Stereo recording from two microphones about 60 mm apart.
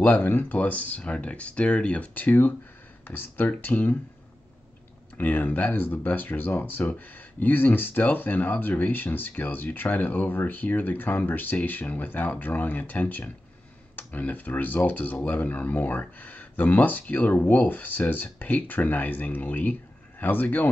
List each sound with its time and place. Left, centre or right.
0.0 s speech: left
5.1 s speech: left